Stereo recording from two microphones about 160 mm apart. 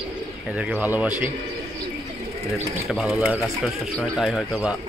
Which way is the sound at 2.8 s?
5° right (ahead or behind).